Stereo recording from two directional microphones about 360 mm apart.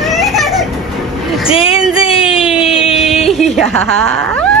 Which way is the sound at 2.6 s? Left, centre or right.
Centre.